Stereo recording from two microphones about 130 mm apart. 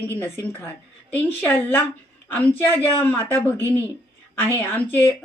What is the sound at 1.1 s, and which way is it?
A woman's voice, 15° left (ahead or behind).